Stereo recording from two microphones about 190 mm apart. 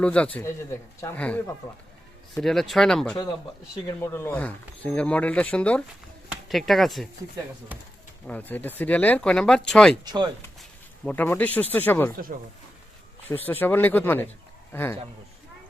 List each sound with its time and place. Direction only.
0.0 s speech: 5° left (ahead or behind)
8.3 s speech: 10° left (ahead or behind)
10.0 s speech: 20° right (ahead or behind)
10.6 s a sound: 5° left (ahead or behind)
11.7 s speech: 10° left (ahead or behind)
12.1 s speech: 50° right (ahead or behind)
13.2 s speech: 10° left (ahead or behind)